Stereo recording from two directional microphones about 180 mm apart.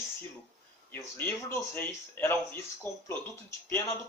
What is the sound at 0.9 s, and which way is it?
Speech, 10° left (ahead or behind).